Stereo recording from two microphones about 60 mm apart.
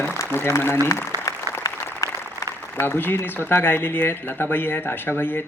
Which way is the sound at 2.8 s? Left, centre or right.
Left.